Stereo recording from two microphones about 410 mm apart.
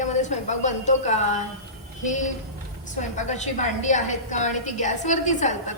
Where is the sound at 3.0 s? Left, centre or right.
Centre.